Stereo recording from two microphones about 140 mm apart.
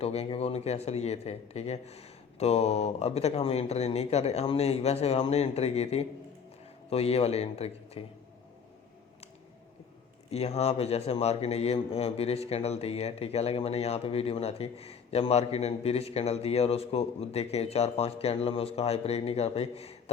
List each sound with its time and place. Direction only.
0.0 s a man's voice: 45° left (ahead or behind)
10.3 s a man's voice: 50° left (ahead or behind)